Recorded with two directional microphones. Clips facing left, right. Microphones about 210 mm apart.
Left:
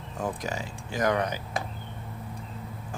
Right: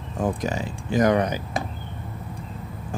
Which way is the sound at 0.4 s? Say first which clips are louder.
Right 6 dB; 20° right (ahead or behind).